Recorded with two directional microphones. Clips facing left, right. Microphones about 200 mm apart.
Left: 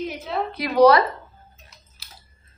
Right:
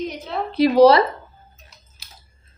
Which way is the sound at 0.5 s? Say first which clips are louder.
Right 3 dB; 30° right (ahead or behind).